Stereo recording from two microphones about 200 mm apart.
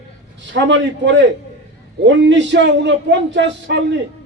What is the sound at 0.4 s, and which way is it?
A man's voice, 60° right (ahead or behind).